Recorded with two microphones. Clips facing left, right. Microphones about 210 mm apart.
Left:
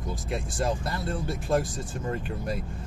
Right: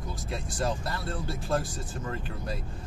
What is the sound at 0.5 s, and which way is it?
Speech, 25° left (ahead or behind).